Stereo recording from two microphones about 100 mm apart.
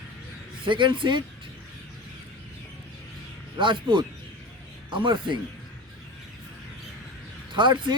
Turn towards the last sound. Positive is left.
turn(degrees=-50)  # may be behind; listen again after turning